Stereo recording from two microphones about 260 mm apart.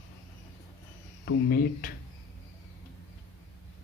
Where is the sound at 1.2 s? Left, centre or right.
Left.